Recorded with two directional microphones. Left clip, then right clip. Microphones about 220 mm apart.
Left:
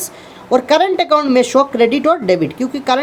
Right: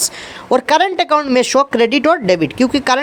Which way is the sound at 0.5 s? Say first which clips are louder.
Even; 20° right (ahead or behind).